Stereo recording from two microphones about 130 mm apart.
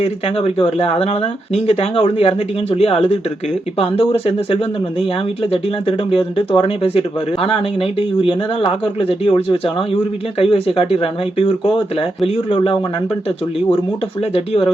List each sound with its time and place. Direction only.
0.0 s speech: 50° left (ahead or behind)
14.2 s speech: 50° left (ahead or behind)